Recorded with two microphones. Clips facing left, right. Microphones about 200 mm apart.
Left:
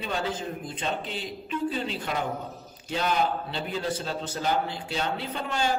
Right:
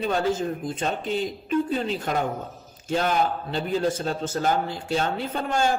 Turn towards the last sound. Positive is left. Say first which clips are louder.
# right 4 dB
turn(degrees=-45)  # may be behind; listen again after turning